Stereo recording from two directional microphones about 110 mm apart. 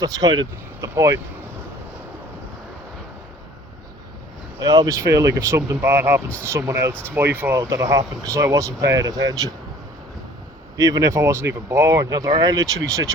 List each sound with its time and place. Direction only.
0.0 s speech: 35° right (ahead or behind)
0.8 s speech: 25° right (ahead or behind)
4.6 s speech: 30° right (ahead or behind)
10.8 s speech: 30° right (ahead or behind)